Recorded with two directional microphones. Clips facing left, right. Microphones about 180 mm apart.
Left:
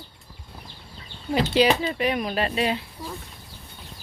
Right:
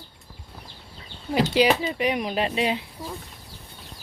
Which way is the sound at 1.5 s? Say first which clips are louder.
Left 1 dB; 10° right (ahead or behind).